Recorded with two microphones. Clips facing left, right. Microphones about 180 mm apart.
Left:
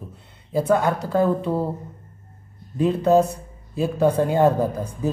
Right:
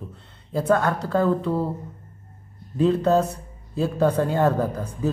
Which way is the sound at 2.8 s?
15° left (ahead or behind).